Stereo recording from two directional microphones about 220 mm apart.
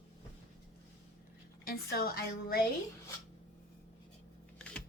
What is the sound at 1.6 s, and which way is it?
Speech, 45° left (ahead or behind).